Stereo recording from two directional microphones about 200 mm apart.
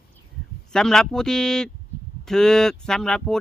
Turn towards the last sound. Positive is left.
turn(degrees=5)  # may be behind; listen again after turning